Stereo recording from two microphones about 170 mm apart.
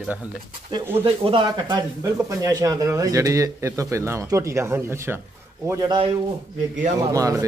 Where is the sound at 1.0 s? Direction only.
30° right (ahead or behind).